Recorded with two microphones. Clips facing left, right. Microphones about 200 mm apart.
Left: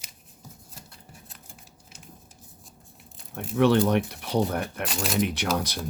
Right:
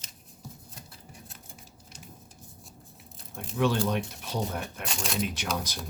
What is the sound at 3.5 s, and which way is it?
Speech, 65° left (ahead or behind).